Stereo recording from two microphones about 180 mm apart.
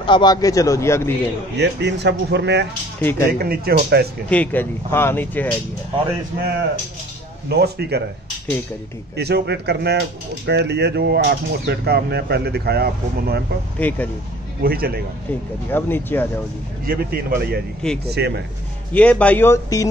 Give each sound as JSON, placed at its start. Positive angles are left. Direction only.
{"t": 0.0, "sound": "speech", "side_deg": 25}
{"t": 1.6, "sound": "speech", "side_deg": -75}
{"t": 3.0, "sound": "speech", "side_deg": 10}
{"t": 3.3, "sound": "speech", "side_deg": -60}
{"t": 4.3, "sound": "speech", "side_deg": 10}
{"t": 7.4, "sound": "speech", "side_deg": -65}
{"t": 9.1, "sound": "speech", "side_deg": -70}
{"t": 13.7, "sound": "speech", "side_deg": 10}
{"t": 14.6, "sound": "speech", "side_deg": -55}
{"t": 15.7, "sound": "speech", "side_deg": 10}
{"t": 16.8, "sound": "speech", "side_deg": -55}
{"t": 18.9, "sound": "speech", "side_deg": 5}